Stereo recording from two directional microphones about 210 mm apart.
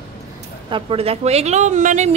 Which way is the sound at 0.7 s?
25° right (ahead or behind).